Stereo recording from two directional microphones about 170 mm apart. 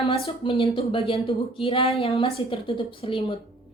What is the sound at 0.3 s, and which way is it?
A woman's voice, 35° left (ahead or behind).